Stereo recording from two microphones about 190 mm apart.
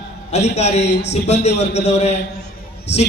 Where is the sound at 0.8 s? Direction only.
65° left (ahead or behind).